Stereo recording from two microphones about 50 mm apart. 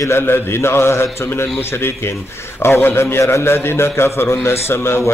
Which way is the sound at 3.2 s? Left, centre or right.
Left.